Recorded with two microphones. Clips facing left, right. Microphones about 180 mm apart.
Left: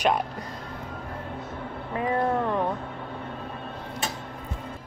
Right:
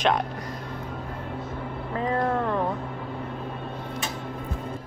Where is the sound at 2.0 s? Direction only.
15° left (ahead or behind).